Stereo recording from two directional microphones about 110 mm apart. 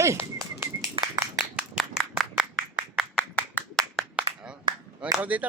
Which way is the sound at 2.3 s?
10° right (ahead or behind).